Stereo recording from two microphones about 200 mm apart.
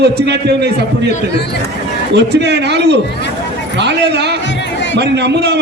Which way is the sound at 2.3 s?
60° right (ahead or behind).